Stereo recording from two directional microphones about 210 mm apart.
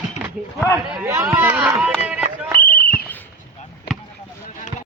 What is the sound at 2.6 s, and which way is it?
Basketball bounce, 45° left (ahead or behind).